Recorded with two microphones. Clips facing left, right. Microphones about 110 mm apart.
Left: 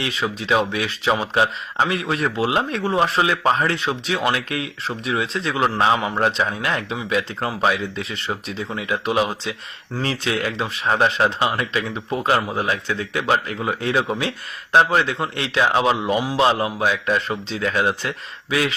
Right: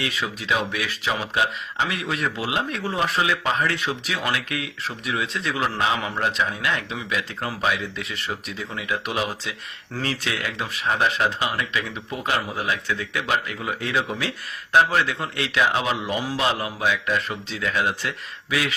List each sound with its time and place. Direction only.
0.0 s a man's voice: 30° left (ahead or behind)